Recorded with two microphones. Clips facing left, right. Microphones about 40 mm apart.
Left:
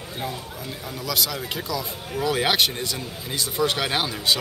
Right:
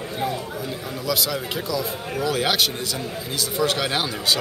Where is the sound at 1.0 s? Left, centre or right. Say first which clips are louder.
Right 2 dB; centre.